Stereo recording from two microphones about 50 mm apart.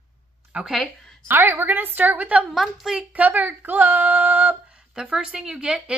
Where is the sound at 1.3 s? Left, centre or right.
Right.